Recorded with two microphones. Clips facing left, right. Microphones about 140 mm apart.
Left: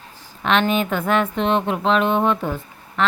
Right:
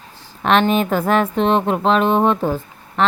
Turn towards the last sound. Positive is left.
turn(degrees=-35)  # may be behind; listen again after turning